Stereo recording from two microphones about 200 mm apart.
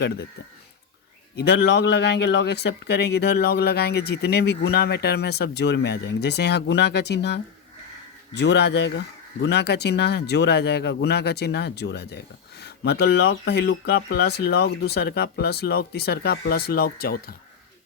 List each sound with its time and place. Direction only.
1.4 s speech: 55° left (ahead or behind)